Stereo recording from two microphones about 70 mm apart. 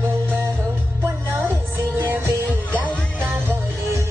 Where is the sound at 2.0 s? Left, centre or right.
Right.